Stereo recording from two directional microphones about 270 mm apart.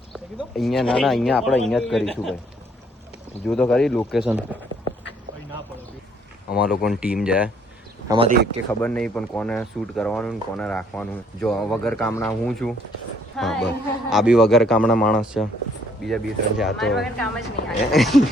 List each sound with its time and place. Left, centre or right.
0.1 s speech: centre
3.4 s speech: centre
6.5 s speech: centre
8.0 s speech: centre
8.8 s speech: centre